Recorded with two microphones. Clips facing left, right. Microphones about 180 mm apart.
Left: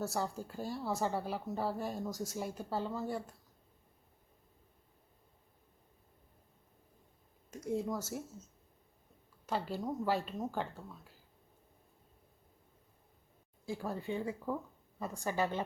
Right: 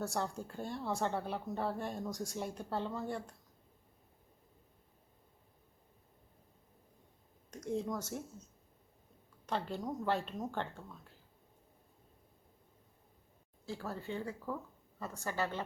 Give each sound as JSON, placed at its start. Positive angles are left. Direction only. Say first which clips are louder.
{"t": 0.0, "sound": "speech", "louder": "left 1 dB", "side_deg": 5}
{"t": 7.5, "sound": "speech", "louder": "left 1 dB", "side_deg": 5}
{"t": 9.5, "sound": "speech", "louder": "left 1 dB", "side_deg": 5}
{"t": 13.7, "sound": "speech", "louder": "left 3 dB", "side_deg": 15}